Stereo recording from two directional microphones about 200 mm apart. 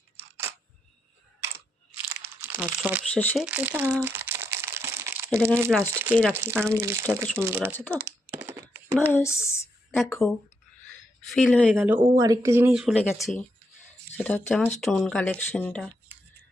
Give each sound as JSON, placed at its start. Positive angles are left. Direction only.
{"t": 0.2, "sound": "single-lens reflex camera", "side_deg": -10}
{"t": 2.1, "sound": "crumpling", "side_deg": -10}
{"t": 3.1, "sound": "speech", "side_deg": 5}
{"t": 3.4, "sound": "crumpling", "side_deg": -10}
{"t": 5.8, "sound": "speech", "side_deg": -15}
{"t": 7.9, "sound": "a sound", "side_deg": -10}
{"t": 9.0, "sound": "speech", "side_deg": 10}
{"t": 10.0, "sound": "speech", "side_deg": 0}
{"t": 11.3, "sound": "speech", "side_deg": 5}
{"t": 11.7, "sound": "speech", "side_deg": -5}
{"t": 12.1, "sound": "speech", "side_deg": -20}
{"t": 12.7, "sound": "speech", "side_deg": 0}